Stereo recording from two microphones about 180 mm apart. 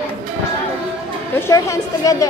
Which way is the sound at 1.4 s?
15° left (ahead or behind).